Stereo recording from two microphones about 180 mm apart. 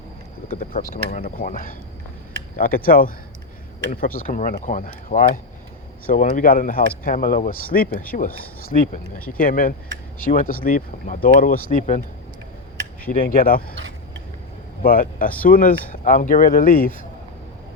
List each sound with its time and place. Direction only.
0.5 s speech: 45° left (ahead or behind)
13.1 s speech: 50° left (ahead or behind)
14.8 s speech: 55° left (ahead or behind)